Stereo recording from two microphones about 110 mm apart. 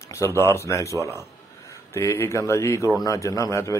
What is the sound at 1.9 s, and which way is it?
A man's voice, 25° left (ahead or behind).